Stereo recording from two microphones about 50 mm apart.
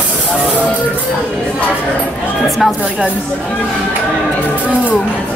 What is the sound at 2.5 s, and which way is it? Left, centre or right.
Speech, centre.